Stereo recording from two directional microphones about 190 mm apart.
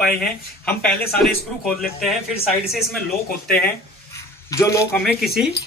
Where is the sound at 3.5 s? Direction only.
10° left (ahead or behind).